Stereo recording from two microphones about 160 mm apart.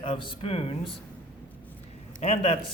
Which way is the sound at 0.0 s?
30° left (ahead or behind).